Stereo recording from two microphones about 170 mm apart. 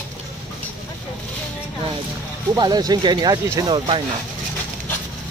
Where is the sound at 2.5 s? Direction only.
25° right (ahead or behind).